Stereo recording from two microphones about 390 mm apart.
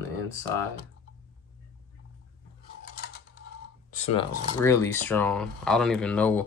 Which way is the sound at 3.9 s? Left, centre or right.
Centre.